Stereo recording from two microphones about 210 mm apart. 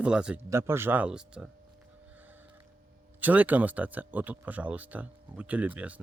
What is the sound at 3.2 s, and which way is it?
Speech, 10° right (ahead or behind).